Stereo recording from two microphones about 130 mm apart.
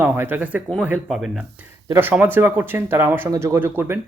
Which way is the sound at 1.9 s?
15° right (ahead or behind).